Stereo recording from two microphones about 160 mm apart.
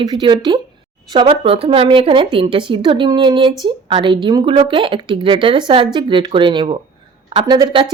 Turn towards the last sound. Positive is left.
turn(degrees=-30)  # may be behind; listen again after turning